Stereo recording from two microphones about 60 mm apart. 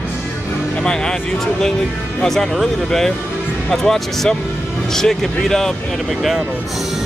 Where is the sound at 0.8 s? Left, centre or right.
Centre.